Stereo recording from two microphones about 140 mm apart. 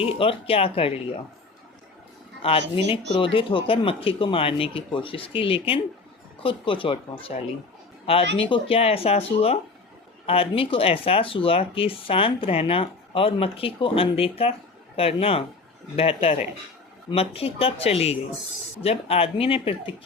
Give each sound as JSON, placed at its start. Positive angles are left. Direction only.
{"t": 0.0, "sound": "speech", "side_deg": 40}
{"t": 2.4, "sound": "speech", "side_deg": 40}